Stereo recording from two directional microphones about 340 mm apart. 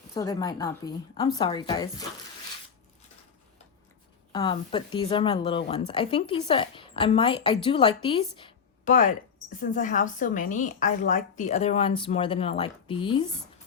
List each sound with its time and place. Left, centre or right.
0.1 s a woman's voice: centre
4.3 s a woman's voice: centre